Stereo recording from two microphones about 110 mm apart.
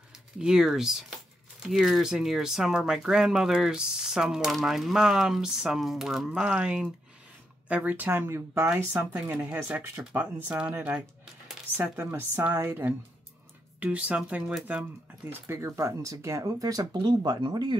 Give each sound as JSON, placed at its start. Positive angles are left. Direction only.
{"t": 0.4, "sound": "speech", "side_deg": -5}
{"t": 12.1, "sound": "speech", "side_deg": -25}
{"t": 13.7, "sound": "speech", "side_deg": -10}
{"t": 15.4, "sound": "speech", "side_deg": -25}